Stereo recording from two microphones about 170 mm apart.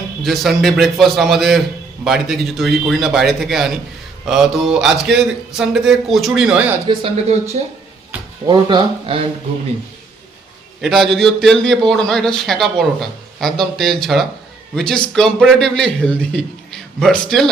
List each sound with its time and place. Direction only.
0.2 s a man's voice: centre (ahead or behind)
6.8 s speech: 35° right (ahead or behind)
7.6 s speech: 45° right (ahead or behind)
8.4 s speech: 25° right (ahead or behind)
10.8 s a man's voice: centre (ahead or behind)